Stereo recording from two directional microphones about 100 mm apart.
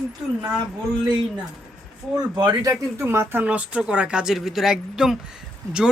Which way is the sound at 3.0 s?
20° right (ahead or behind).